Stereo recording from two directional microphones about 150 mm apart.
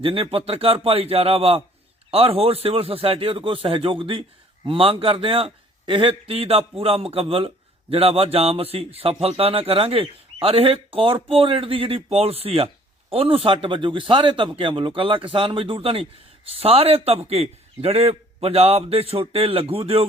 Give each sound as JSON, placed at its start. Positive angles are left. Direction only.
{"t": 0.0, "sound": "a man's voice", "side_deg": -40}